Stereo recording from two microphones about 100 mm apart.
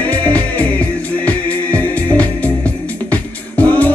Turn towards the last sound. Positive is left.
turn(degrees=15)  # may be behind; listen again after turning